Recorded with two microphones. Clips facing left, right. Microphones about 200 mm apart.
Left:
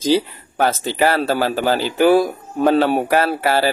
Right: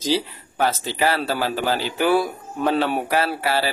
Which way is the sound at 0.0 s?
50° left (ahead or behind).